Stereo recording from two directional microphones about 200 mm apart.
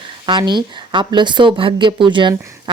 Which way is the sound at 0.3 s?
20° right (ahead or behind).